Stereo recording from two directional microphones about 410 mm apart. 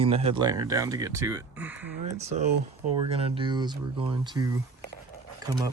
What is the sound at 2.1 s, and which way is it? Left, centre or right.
Speech, centre.